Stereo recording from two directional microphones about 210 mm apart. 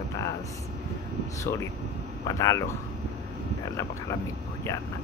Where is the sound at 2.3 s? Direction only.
15° left (ahead or behind).